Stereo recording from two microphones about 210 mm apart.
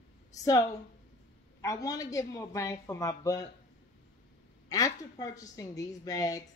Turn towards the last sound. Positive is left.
turn(degrees=15)  # may be behind; listen again after turning